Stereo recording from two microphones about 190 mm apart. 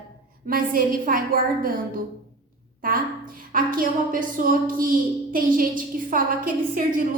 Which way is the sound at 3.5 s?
45° right (ahead or behind).